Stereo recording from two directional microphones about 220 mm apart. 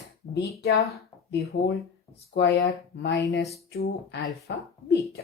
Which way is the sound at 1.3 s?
50° left (ahead or behind).